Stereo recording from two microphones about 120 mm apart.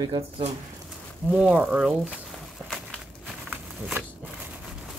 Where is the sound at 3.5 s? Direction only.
10° right (ahead or behind).